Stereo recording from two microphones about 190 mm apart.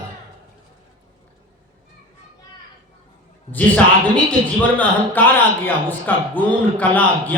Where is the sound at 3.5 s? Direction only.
10° left (ahead or behind).